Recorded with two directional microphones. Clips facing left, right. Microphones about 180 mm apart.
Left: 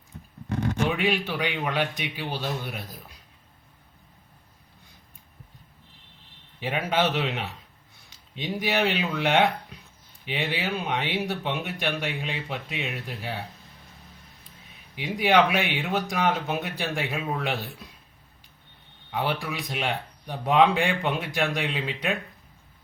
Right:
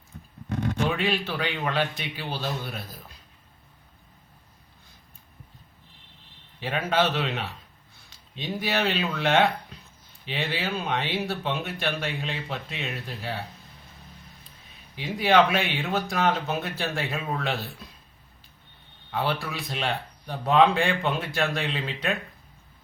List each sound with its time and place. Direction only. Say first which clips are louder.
0.9 s speech: left 1 dB; 15° left (ahead or behind)
6.6 s speech: even; 15° left (ahead or behind)
14.9 s speech: right 1 dB; 15° left (ahead or behind)
19.1 s speech: even; 15° left (ahead or behind)